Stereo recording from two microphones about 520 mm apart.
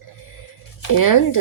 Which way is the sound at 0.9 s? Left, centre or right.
Left.